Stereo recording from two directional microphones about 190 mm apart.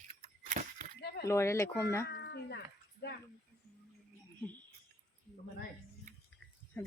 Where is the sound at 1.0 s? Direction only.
60° left (ahead or behind).